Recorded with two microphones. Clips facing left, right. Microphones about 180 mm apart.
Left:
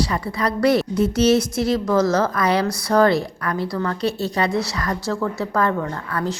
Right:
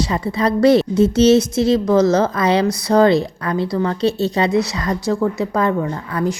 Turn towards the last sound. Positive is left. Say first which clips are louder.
# right 4 dB
turn(degrees=-15)  # may be behind; listen again after turning